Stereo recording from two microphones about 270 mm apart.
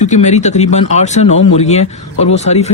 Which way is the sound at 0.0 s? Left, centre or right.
Left.